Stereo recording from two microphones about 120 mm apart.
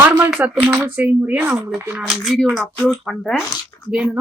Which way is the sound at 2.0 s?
5° left (ahead or behind).